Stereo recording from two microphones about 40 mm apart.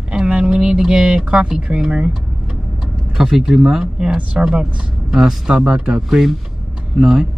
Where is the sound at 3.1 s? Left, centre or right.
Centre.